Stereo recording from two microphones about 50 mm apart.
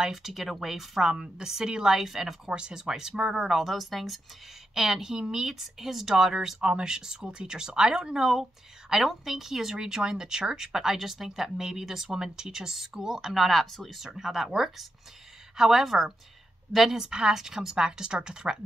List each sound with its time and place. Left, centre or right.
0.0 s a woman's voice: centre